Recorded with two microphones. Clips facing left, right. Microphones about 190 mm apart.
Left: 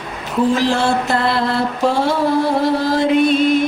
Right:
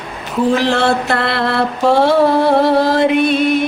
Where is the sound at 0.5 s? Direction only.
65° right (ahead or behind).